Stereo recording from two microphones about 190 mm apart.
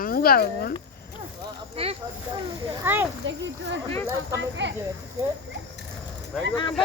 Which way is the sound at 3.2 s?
70° right (ahead or behind).